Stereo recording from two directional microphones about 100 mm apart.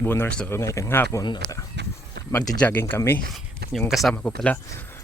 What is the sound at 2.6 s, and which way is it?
Speech, 20° left (ahead or behind).